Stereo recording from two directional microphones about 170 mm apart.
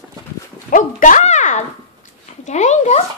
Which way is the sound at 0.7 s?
50° left (ahead or behind).